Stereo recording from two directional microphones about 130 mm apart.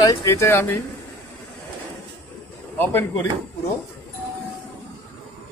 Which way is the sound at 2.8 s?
15° left (ahead or behind).